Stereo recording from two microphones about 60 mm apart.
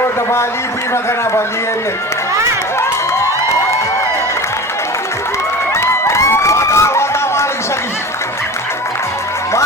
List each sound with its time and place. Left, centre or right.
5.7 s crowd: left